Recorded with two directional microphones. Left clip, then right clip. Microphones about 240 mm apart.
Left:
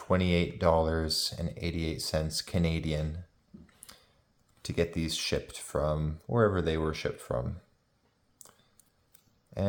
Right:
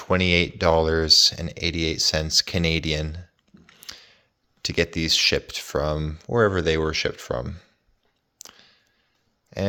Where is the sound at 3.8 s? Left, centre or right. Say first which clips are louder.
Right 16 dB; right.